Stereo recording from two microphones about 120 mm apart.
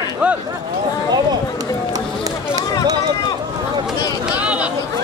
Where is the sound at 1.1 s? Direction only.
30° right (ahead or behind).